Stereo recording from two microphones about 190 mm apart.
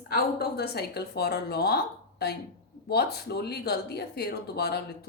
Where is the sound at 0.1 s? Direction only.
55° left (ahead or behind).